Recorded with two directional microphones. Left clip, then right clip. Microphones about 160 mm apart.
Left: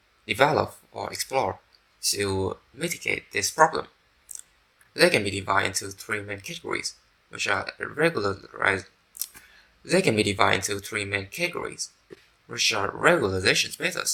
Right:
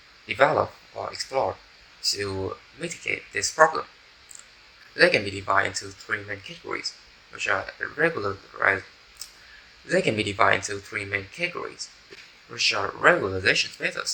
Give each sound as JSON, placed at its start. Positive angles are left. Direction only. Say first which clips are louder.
{"t": 0.3, "sound": "speech", "louder": "right 1 dB", "side_deg": 40}
{"t": 4.9, "sound": "speech", "louder": "right 1 dB", "side_deg": 40}
{"t": 9.8, "sound": "speech", "louder": "left 1 dB", "side_deg": 40}